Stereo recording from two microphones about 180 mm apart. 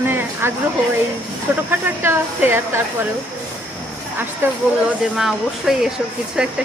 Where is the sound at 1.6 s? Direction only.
10° right (ahead or behind).